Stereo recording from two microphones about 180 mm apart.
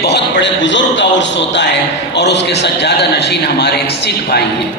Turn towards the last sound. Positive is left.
turn(degrees=65)  # may be behind; listen again after turning